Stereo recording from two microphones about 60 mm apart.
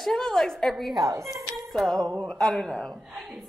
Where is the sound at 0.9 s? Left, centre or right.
Right.